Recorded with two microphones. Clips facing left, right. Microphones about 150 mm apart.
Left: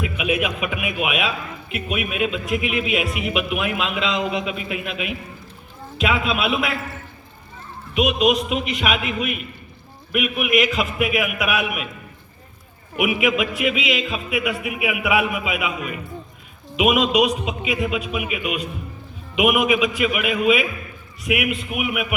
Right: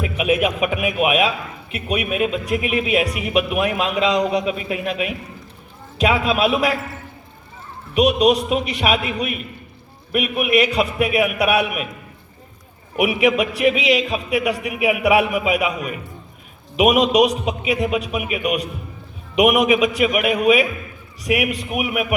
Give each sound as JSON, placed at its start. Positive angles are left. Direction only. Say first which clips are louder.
{"t": 0.2, "sound": "a man's voice", "louder": "right 6 dB", "side_deg": -40}
{"t": 7.9, "sound": "a man's voice", "louder": "right 3 dB", "side_deg": -40}
{"t": 13.0, "sound": "a man's voice", "louder": "right 3 dB", "side_deg": -35}
{"t": 16.7, "sound": "a man's voice", "louder": "right 3 dB", "side_deg": -40}
{"t": 19.4, "sound": "a man's voice", "louder": "right 3 dB", "side_deg": -40}